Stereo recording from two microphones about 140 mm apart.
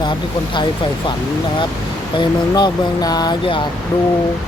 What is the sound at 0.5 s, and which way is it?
Speech, 35° left (ahead or behind).